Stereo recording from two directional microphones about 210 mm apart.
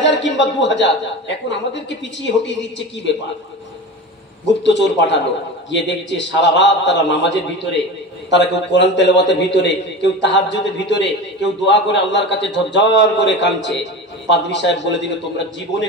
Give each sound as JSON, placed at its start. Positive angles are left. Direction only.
{"t": 0.0, "sound": "a man's voice", "side_deg": 55}
{"t": 4.5, "sound": "a man's voice", "side_deg": 55}